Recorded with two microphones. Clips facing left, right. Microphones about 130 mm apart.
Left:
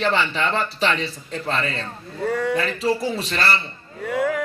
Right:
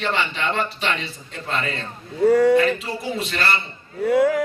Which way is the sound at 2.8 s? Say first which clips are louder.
Left 5 dB; 35° left (ahead or behind).